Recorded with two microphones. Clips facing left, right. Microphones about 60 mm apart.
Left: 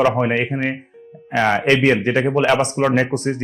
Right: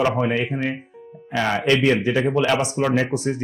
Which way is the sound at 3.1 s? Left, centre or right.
Left.